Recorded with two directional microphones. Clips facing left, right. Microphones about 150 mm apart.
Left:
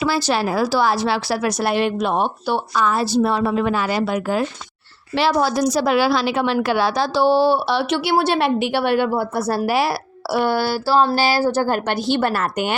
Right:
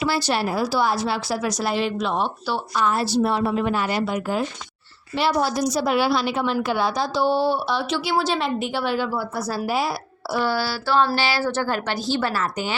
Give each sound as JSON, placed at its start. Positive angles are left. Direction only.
{"t": 0.2, "sound": "a woman's voice", "side_deg": 90}
{"t": 3.4, "sound": "a woman's voice", "side_deg": 90}
{"t": 9.6, "sound": "speech", "side_deg": 75}
{"t": 10.8, "sound": "speech", "side_deg": 35}